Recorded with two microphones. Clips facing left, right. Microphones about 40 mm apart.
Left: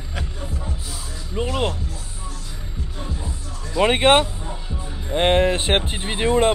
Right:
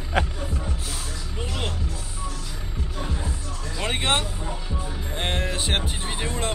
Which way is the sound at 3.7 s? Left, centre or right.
Left.